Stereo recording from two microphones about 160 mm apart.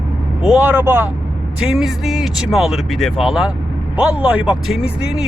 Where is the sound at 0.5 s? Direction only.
15° right (ahead or behind).